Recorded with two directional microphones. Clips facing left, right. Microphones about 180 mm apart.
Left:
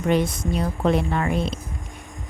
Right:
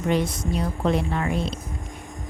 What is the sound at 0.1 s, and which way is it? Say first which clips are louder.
A woman's voice: left 2 dB; 55° left (ahead or behind).